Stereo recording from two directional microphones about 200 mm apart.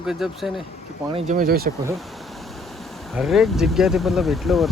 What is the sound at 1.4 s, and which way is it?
Speech, 50° right (ahead or behind).